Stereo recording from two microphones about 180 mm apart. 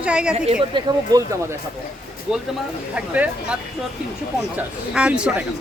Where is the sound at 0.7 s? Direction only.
20° right (ahead or behind).